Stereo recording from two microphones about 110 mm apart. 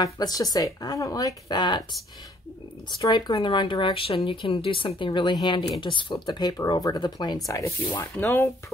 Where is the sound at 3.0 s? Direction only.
35° left (ahead or behind).